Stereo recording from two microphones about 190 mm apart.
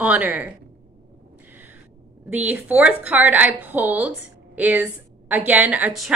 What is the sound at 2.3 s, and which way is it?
Speech, 10° right (ahead or behind).